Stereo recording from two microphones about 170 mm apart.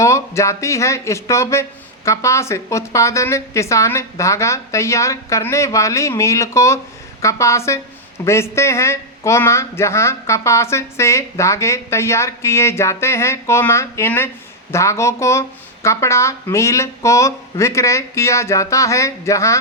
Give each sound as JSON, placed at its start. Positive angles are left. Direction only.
{"t": 0.0, "sound": "a man's voice", "side_deg": 15}